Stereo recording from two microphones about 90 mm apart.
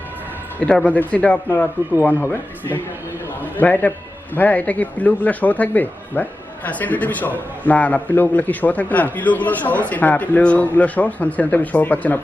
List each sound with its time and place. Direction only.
0.6 s a man's voice: 15° left (ahead or behind)